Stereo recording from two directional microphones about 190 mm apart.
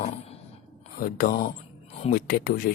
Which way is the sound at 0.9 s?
50° left (ahead or behind).